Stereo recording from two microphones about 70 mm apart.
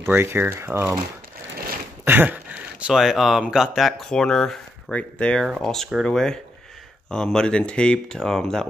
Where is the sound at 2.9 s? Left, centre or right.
Centre.